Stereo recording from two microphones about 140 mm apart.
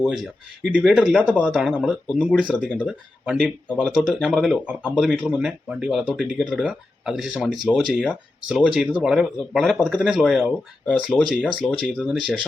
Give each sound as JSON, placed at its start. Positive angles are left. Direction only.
{"t": 0.6, "sound": "speech", "side_deg": -5}